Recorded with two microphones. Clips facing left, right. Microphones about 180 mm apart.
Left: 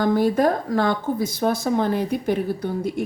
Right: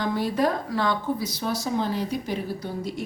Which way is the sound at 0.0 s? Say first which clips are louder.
Left 6 dB; 45° left (ahead or behind).